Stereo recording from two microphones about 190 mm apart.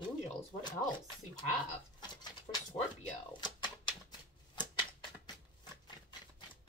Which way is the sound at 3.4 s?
25° left (ahead or behind).